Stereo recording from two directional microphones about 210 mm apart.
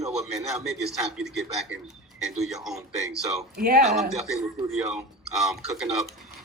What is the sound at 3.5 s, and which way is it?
Speech, 50° right (ahead or behind).